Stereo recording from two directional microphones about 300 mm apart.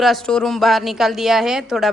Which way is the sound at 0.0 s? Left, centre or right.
Centre.